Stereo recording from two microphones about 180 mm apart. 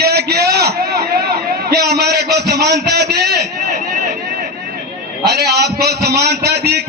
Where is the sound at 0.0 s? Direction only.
65° right (ahead or behind).